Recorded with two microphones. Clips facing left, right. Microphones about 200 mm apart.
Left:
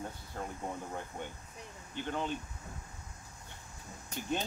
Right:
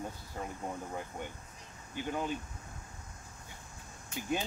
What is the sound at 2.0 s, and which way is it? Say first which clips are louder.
Speech: right 1 dB; 10° right (ahead or behind).